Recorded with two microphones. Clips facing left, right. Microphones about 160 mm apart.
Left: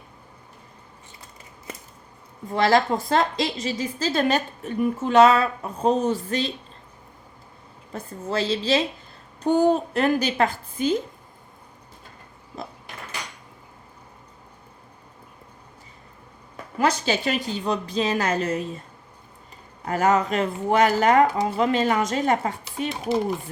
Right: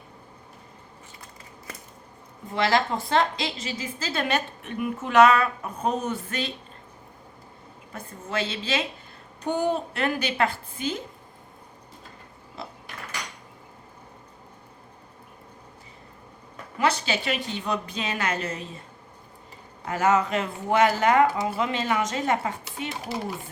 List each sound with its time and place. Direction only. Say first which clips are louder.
2.6 s a woman's voice: left 4 dB; 40° left (ahead or behind)
7.9 s a woman's voice: left 4 dB; 35° left (ahead or behind)
16.7 s a woman's voice: left 3 dB; 40° left (ahead or behind)
19.9 s a woman's voice: left 2 dB; 40° left (ahead or behind)